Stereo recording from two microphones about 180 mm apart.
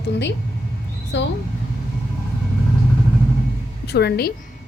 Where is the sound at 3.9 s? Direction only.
65° left (ahead or behind).